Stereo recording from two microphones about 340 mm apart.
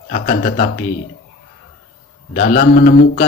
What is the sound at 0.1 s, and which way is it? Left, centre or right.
Speech, left.